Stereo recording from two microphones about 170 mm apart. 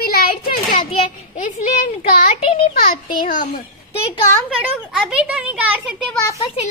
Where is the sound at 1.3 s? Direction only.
50° left (ahead or behind).